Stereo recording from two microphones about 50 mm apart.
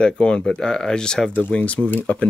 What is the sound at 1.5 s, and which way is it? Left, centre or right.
Speech, left.